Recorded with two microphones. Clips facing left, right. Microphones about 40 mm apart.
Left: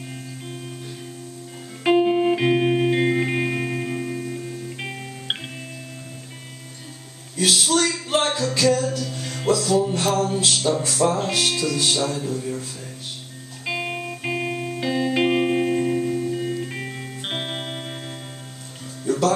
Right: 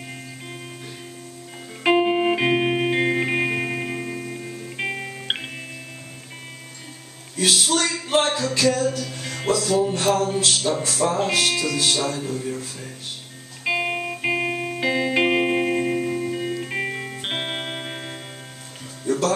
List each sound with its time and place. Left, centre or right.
1.8 s music: centre
7.3 s a sound: centre
8.4 s music: centre
10.8 s speech: centre
13.7 s music: centre
19.0 s music: centre